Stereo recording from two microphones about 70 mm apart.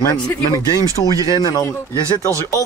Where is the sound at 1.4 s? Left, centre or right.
Left.